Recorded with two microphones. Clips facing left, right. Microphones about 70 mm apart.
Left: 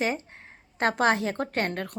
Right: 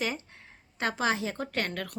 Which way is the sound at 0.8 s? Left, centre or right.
Left.